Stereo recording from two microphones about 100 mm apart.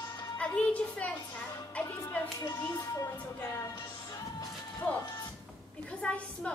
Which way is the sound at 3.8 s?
40° left (ahead or behind).